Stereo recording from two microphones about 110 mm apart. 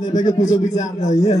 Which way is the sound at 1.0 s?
90° left.